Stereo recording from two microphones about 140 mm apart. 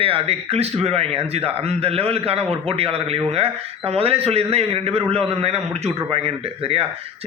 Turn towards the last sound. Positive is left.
turn(degrees=-45)  # may be behind; listen again after turning